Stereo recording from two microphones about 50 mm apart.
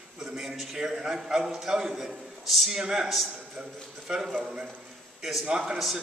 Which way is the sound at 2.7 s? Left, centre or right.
Centre.